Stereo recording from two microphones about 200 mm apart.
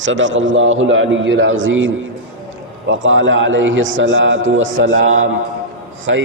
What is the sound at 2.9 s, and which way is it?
A man's voice, 70° right (ahead or behind).